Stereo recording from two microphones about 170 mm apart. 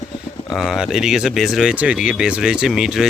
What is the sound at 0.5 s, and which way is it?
Speech, centre (ahead or behind).